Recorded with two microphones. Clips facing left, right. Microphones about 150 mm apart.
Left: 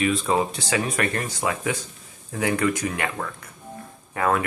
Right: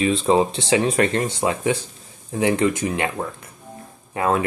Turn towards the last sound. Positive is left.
turn(degrees=-25)  # may be behind; listen again after turning